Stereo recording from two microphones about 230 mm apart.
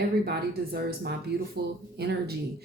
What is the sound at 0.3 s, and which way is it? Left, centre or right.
A woman's voice, right.